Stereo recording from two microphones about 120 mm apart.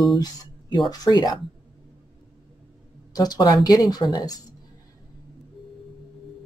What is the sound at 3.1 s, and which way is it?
Speech, 30° left (ahead or behind).